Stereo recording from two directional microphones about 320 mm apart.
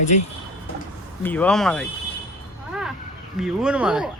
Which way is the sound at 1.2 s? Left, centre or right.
Centre.